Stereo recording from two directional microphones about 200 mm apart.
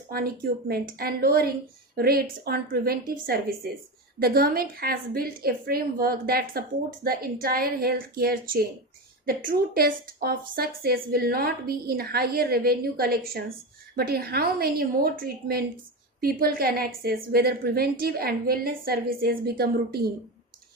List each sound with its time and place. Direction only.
0.1 s a woman's voice: 50° right (ahead or behind)